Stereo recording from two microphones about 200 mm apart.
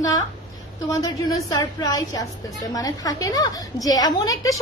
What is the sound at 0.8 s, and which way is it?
A woman's voice, 20° left (ahead or behind).